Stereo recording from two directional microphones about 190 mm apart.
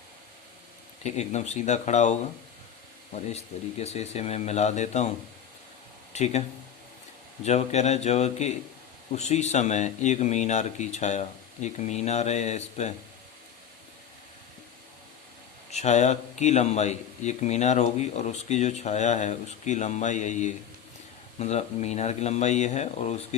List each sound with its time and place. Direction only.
1.0 s speech: 35° left (ahead or behind)
3.2 s speech: 35° left (ahead or behind)
6.1 s speech: 35° left (ahead or behind)
7.4 s speech: 35° left (ahead or behind)
15.7 s speech: 35° left (ahead or behind)